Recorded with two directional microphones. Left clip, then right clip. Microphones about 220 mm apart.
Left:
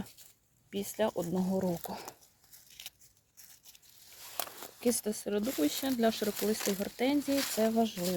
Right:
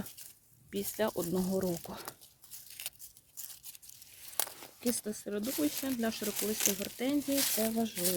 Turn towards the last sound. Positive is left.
turn(degrees=20)  # may be behind; listen again after turning